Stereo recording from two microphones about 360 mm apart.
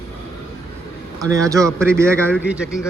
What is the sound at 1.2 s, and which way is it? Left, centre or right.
Speech, centre.